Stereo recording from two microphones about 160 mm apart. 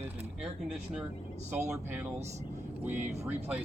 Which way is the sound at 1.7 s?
10° right (ahead or behind).